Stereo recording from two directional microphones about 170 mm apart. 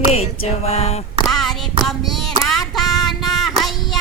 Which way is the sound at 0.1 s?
40° left (ahead or behind).